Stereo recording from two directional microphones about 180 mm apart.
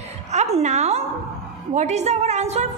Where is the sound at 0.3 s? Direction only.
40° right (ahead or behind).